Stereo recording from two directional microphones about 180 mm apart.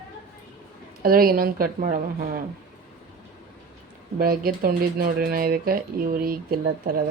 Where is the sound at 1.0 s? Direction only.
55° right (ahead or behind).